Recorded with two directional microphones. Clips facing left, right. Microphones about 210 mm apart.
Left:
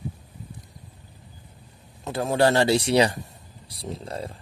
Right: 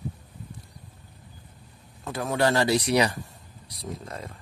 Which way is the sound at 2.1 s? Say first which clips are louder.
Left 3 dB; 30° left (ahead or behind).